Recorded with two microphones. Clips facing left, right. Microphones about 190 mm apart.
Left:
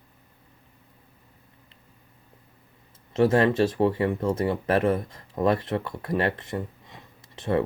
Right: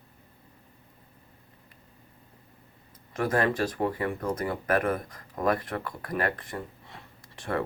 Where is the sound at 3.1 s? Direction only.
25° left (ahead or behind).